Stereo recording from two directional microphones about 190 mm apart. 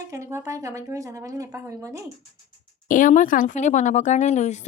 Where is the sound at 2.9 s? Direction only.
45° left (ahead or behind).